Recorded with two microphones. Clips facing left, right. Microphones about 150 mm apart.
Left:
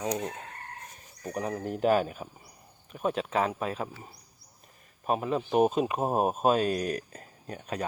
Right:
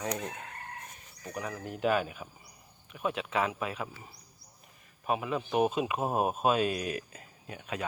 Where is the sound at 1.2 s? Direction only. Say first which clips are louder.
Left 6 dB; 35° left (ahead or behind).